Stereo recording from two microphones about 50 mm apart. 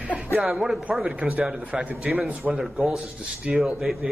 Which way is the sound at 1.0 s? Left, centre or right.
Centre.